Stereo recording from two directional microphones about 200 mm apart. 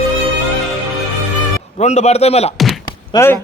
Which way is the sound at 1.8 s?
35° left (ahead or behind).